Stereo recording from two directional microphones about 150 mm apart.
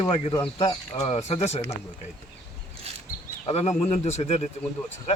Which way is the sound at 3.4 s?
45° left (ahead or behind).